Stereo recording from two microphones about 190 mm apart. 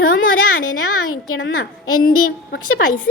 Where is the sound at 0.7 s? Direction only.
90° left.